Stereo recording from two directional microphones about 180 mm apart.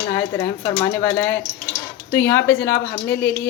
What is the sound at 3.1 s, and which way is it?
Speech, 65° left (ahead or behind).